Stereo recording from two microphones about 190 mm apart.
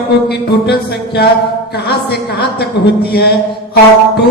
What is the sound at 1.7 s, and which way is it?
Speech, 55° left (ahead or behind).